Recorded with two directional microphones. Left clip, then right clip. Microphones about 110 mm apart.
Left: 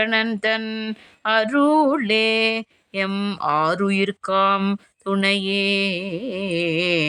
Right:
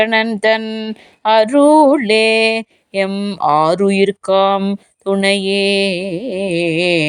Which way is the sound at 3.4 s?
25° right (ahead or behind).